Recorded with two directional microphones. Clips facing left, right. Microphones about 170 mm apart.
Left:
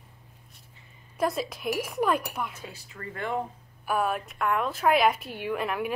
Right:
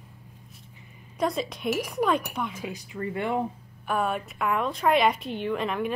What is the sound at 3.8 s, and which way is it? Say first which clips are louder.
A woman's voice: even; 5° left (ahead or behind).